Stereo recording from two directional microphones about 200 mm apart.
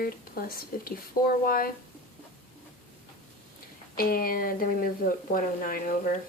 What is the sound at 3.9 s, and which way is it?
A woman's voice, 45° left (ahead or behind).